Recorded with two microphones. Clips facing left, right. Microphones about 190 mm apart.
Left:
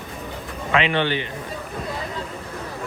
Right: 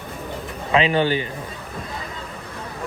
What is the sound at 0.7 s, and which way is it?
Speech, 35° right (ahead or behind).